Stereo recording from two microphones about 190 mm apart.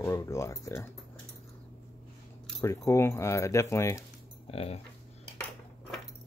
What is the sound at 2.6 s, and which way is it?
Speech, 15° left (ahead or behind).